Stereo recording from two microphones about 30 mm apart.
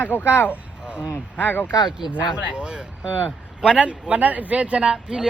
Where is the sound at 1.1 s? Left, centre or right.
Left.